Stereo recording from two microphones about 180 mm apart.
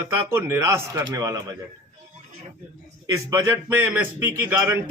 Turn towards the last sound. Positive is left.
turn(degrees=-10)  # may be behind; listen again after turning